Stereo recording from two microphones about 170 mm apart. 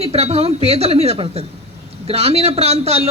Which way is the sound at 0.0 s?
35° right (ahead or behind).